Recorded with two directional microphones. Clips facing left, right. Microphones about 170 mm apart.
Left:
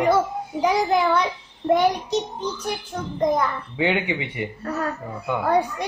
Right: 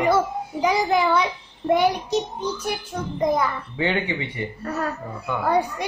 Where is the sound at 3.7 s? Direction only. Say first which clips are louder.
Left 3 dB; 10° left (ahead or behind).